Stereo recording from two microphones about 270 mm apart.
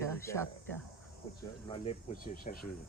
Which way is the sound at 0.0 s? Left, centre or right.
Centre.